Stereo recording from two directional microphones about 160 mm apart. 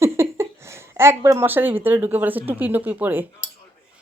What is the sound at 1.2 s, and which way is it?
Speech, 20° right (ahead or behind).